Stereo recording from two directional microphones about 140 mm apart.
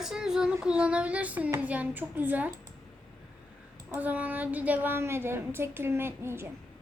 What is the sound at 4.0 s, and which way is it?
A woman's voice, 10° right (ahead or behind).